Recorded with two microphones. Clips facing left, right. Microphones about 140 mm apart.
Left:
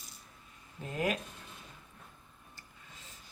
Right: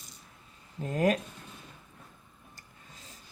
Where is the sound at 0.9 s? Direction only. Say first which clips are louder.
Right 7 dB; 45° right (ahead or behind).